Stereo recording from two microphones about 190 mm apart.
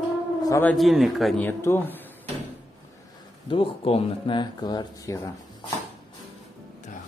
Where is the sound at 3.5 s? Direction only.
30° left (ahead or behind).